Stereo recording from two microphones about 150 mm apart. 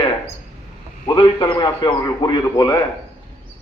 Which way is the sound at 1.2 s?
25° left (ahead or behind).